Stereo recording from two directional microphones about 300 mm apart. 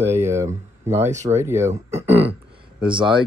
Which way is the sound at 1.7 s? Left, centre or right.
Right.